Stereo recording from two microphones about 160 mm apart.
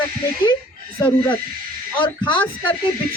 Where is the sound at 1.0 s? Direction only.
25° left (ahead or behind).